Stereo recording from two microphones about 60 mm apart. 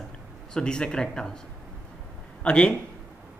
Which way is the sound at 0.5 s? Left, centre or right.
Centre.